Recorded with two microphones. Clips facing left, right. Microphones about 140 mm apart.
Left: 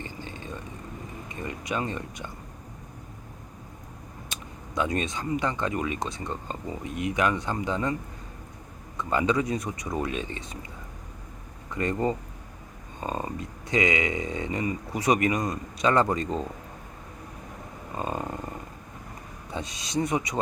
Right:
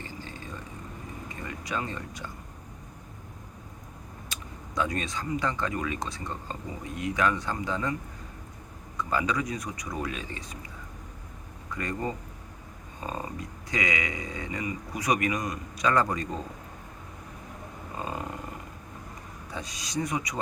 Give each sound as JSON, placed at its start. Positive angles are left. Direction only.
{"t": 0.0, "sound": "a sound", "side_deg": 20}
{"t": 1.4, "sound": "speech", "side_deg": 20}
{"t": 4.3, "sound": "speech", "side_deg": 20}
{"t": 9.0, "sound": "speech", "side_deg": 25}
{"t": 11.7, "sound": "speech", "side_deg": 25}
{"t": 13.0, "sound": "a sound", "side_deg": 25}
{"t": 13.7, "sound": "speech", "side_deg": 25}
{"t": 17.9, "sound": "a sound", "side_deg": 25}
{"t": 19.5, "sound": "speech", "side_deg": 25}